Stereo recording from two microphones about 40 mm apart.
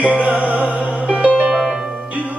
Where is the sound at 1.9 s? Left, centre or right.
Right.